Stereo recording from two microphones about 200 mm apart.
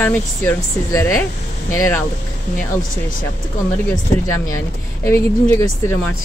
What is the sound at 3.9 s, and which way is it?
Speech, 15° left (ahead or behind).